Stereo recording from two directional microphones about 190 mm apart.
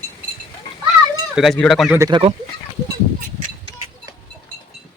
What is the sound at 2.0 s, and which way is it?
Speech, 25° right (ahead or behind).